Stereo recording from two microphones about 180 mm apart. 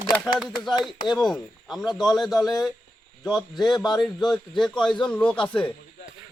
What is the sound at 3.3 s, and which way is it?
A man's voice, centre (ahead or behind).